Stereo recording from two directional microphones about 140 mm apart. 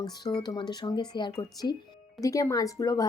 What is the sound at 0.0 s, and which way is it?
A woman's voice, 35° left (ahead or behind).